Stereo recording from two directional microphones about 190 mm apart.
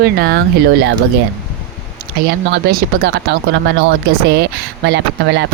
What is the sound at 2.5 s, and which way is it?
Speech, 50° right (ahead or behind).